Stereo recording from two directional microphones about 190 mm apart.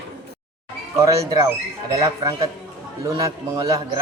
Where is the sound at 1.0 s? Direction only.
15° right (ahead or behind).